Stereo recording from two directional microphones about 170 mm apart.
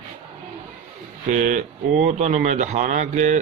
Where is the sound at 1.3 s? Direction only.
45° right (ahead or behind).